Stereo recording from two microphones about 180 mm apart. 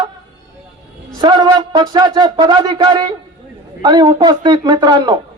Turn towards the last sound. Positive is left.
turn(degrees=-20)  # may be behind; listen again after turning